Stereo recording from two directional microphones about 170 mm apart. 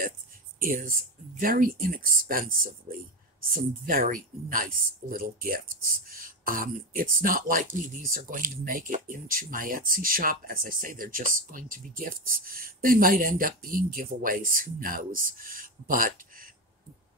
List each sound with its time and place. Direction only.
0.6 s speech: 55° right (ahead or behind)